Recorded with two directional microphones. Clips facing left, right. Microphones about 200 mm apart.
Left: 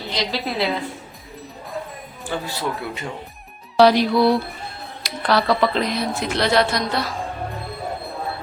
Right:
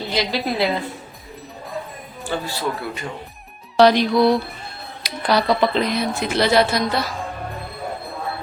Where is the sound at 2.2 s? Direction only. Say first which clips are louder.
Right 1 dB; 20° left (ahead or behind).